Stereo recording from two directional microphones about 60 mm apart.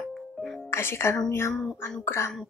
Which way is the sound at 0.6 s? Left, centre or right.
Left.